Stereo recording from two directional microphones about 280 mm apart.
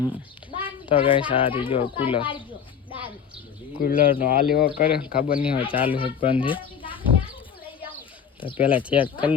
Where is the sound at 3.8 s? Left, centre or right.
Left.